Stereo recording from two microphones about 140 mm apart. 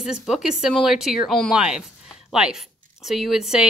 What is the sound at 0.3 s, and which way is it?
A woman's voice, 5° right (ahead or behind).